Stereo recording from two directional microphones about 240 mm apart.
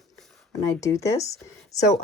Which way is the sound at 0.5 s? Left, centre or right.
Centre.